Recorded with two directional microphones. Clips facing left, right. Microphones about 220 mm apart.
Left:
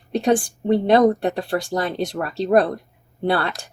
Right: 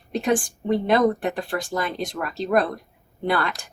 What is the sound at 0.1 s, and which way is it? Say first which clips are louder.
Speech: left 4 dB; 35° left (ahead or behind).